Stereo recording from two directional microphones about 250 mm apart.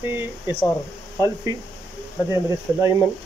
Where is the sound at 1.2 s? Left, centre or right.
Centre.